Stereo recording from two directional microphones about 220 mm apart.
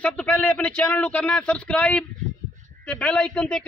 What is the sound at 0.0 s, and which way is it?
Speech, 5° left (ahead or behind).